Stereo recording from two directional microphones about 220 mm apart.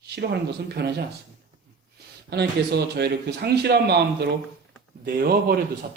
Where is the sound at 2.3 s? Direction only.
45° right (ahead or behind).